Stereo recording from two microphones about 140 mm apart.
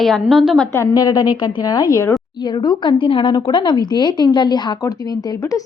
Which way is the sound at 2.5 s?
35° left (ahead or behind).